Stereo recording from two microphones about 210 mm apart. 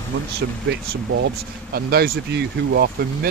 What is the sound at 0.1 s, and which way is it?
Speech, 65° right (ahead or behind).